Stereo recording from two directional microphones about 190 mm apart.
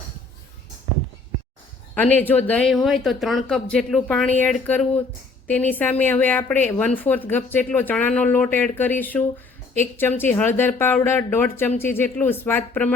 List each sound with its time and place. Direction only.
2.0 s a woman's voice: 10° left (ahead or behind)